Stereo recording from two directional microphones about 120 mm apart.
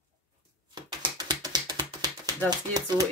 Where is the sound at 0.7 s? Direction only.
35° right (ahead or behind).